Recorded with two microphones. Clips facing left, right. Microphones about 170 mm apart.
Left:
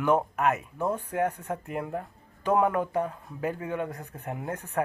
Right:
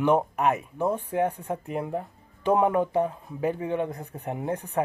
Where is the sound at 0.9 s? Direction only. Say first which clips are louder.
Right 2 dB; 10° right (ahead or behind).